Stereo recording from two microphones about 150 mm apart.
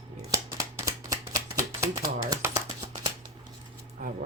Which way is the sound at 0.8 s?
20° right (ahead or behind).